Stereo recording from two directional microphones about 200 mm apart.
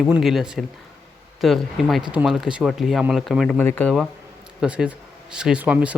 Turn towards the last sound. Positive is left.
turn(degrees=-5)  # may be behind; listen again after turning